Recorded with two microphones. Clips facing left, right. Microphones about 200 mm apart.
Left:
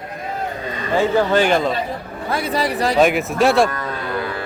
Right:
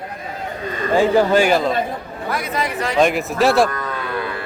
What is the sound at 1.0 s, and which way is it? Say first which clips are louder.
Speech: right 2 dB; 10° right (ahead or behind).